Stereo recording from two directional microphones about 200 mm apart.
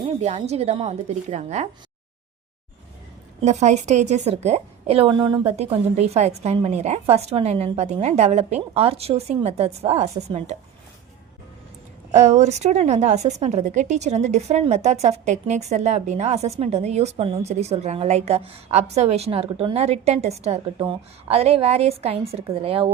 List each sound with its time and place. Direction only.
0.2 s a woman's voice: 35° right (ahead or behind)
3.4 s a woman's voice: 35° right (ahead or behind)
12.1 s a woman's voice: 35° right (ahead or behind)